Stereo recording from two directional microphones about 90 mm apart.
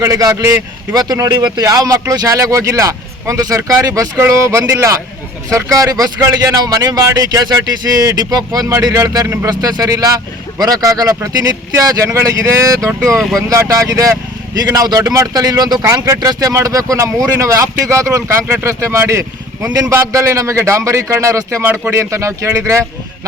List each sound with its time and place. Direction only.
0.0 s speech: 40° right (ahead or behind)